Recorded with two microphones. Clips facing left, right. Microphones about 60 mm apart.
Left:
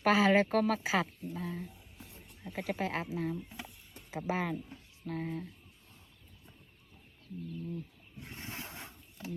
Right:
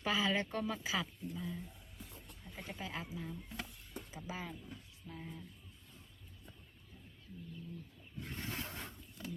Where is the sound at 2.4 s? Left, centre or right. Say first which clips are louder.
Left 11 dB; left.